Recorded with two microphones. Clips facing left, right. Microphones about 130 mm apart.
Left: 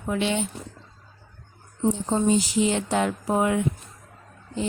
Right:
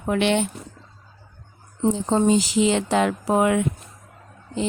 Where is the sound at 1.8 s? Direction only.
90° right.